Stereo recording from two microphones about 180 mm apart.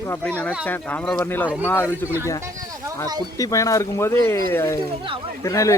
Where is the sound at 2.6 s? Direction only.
20° right (ahead or behind).